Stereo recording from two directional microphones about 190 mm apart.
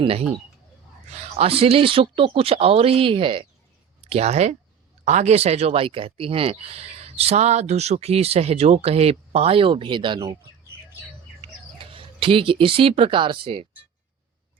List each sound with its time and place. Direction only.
0.0 s speech: 30° right (ahead or behind)
11.3 s speech: 30° right (ahead or behind)